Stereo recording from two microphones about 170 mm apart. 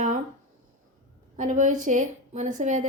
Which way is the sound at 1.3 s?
50° right (ahead or behind).